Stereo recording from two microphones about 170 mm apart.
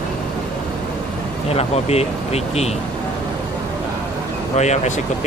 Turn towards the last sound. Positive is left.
turn(degrees=40)  # may be behind; listen again after turning